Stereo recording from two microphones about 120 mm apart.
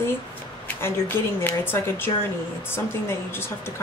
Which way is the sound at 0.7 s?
20° left (ahead or behind).